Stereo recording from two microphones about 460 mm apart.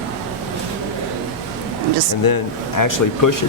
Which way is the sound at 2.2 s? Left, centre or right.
Left.